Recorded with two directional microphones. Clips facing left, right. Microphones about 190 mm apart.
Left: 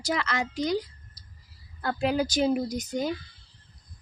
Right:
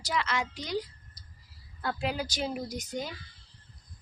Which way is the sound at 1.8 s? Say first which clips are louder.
Left 6 dB; 45° left (ahead or behind).